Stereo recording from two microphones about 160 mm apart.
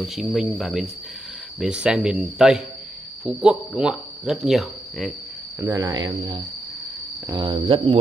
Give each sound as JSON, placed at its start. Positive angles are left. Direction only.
{"t": 0.0, "sound": "speech", "side_deg": 0}
{"t": 5.6, "sound": "speech", "side_deg": -20}